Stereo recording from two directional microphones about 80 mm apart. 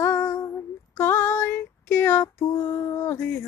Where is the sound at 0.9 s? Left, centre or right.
Left.